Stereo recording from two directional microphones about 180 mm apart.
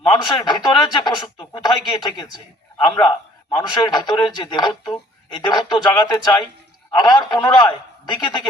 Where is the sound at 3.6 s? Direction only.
20° left (ahead or behind).